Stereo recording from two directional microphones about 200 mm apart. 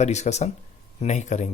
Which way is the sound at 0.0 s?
35° left (ahead or behind).